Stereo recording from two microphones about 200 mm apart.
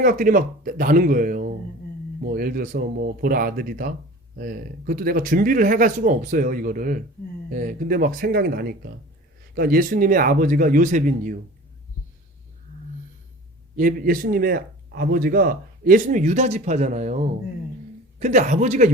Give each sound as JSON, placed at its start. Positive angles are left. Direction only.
{"t": 0.0, "sound": "speech", "side_deg": -45}
{"t": 13.7, "sound": "a man's voice", "side_deg": -45}